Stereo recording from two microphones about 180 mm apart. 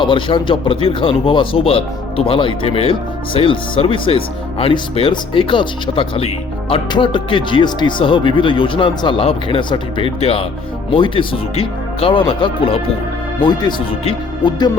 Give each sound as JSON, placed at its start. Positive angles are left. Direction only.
{"t": 0.0, "sound": "speech", "side_deg": 25}